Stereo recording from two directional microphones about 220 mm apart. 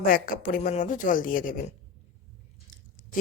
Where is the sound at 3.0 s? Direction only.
35° left (ahead or behind).